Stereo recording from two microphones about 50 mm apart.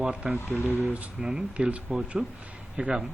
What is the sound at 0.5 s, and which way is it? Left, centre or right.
Speech, left.